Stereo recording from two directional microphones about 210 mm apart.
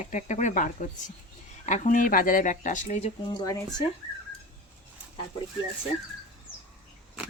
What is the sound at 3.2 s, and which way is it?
Speech, 20° left (ahead or behind).